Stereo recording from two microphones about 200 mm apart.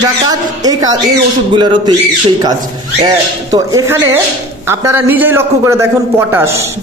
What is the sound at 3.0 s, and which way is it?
A man's voice, 20° right (ahead or behind).